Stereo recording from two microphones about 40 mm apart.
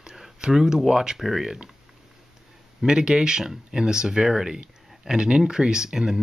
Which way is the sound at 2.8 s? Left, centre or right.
Centre.